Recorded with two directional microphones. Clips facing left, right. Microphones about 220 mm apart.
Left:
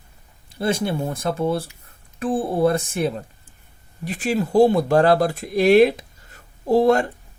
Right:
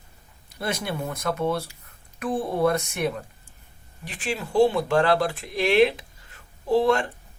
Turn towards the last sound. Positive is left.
turn(degrees=40)  # may be behind; listen again after turning